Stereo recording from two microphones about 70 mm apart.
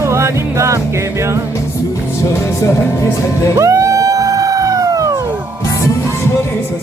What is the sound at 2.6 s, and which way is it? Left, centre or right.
Speech, left.